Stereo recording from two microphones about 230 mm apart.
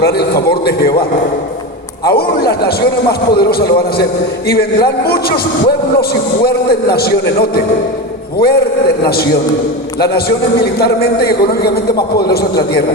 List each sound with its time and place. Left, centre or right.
0.0 s a man's voice: left
2.0 s a man's voice: left